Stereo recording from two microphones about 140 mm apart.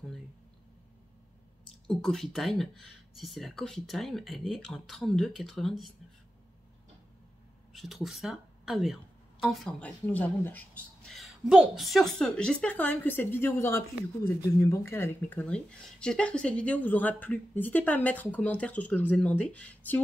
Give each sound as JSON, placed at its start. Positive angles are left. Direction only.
{"t": 1.9, "sound": "speech", "side_deg": 5}
{"t": 7.7, "sound": "speech", "side_deg": 0}
{"t": 11.1, "sound": "speech", "side_deg": 0}